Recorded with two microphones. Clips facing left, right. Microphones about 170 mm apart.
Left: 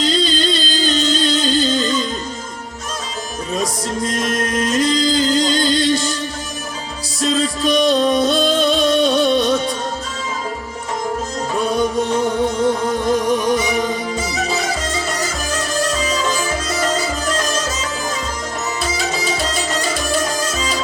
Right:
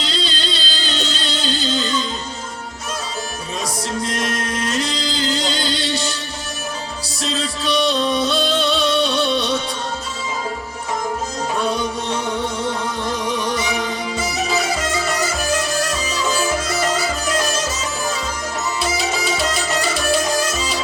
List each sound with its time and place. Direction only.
0.0 s music: 45° left (ahead or behind)
3.5 s music: 45° left (ahead or behind)
7.2 s music: 45° left (ahead or behind)
11.7 s music: 45° left (ahead or behind)
14.2 s music: 10° right (ahead or behind)
18.9 s music: 10° right (ahead or behind)